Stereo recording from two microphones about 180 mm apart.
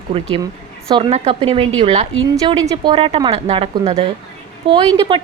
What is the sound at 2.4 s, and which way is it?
A woman's voice, 20° right (ahead or behind).